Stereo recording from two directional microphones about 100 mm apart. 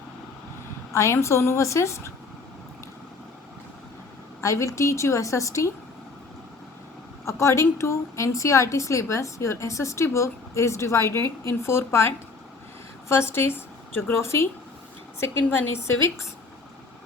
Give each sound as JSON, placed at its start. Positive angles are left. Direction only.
{"t": 0.9, "sound": "a woman's voice", "side_deg": 30}
{"t": 4.4, "sound": "a woman's voice", "side_deg": 30}
{"t": 7.3, "sound": "a woman's voice", "side_deg": 30}